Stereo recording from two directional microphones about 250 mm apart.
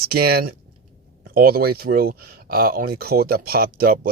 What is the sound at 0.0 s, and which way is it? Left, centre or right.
Speech, right.